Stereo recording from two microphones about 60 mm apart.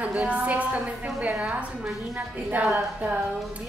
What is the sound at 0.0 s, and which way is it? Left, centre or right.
A woman's voice, right.